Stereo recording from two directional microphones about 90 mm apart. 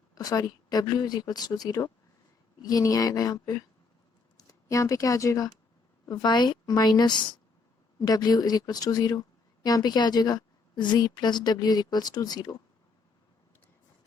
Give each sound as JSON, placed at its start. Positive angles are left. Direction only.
{"t": 0.1, "sound": "speech", "side_deg": 45}
{"t": 6.1, "sound": "a woman's voice", "side_deg": 55}